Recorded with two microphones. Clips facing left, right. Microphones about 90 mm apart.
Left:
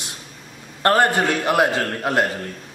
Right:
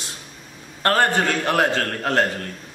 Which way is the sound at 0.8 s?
15° left (ahead or behind).